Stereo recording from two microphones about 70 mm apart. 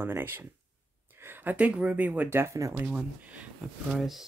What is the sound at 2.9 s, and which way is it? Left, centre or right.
Speech, centre.